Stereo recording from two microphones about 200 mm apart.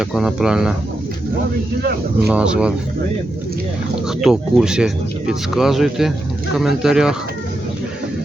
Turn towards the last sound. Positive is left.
turn(degrees=-5)  # may be behind; listen again after turning